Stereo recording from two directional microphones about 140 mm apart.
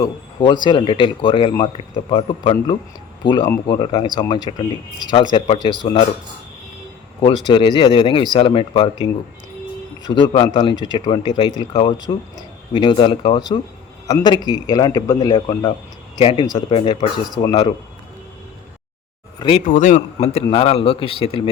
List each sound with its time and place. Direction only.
0.6 s speech: 35° left (ahead or behind)
7.4 s speech: 35° left (ahead or behind)
16.2 s speech: 40° left (ahead or behind)
19.4 s speech: 40° left (ahead or behind)
19.6 s speech: 70° left (ahead or behind)
20.1 s speech: 45° left (ahead or behind)